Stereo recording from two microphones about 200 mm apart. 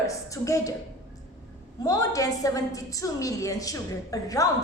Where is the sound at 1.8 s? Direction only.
15° left (ahead or behind).